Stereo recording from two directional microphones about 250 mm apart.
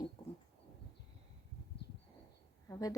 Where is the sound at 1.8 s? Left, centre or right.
Left.